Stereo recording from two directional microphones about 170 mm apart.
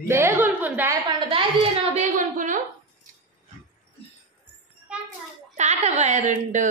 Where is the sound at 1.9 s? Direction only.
50° right (ahead or behind).